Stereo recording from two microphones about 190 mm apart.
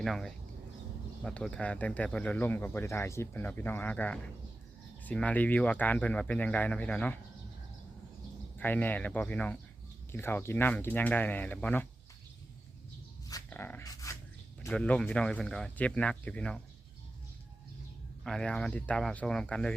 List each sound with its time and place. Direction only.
0.0 s speech: centre (ahead or behind)
8.5 s speech: 10° left (ahead or behind)
13.5 s a sound: 10° left (ahead or behind)
14.7 s speech: 5° left (ahead or behind)
18.2 s speech: 5° left (ahead or behind)